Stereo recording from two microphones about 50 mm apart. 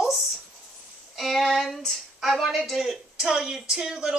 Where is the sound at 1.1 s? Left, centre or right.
Centre.